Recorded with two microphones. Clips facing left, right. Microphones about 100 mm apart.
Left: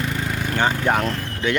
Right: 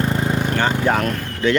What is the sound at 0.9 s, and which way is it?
Speech, 15° left (ahead or behind).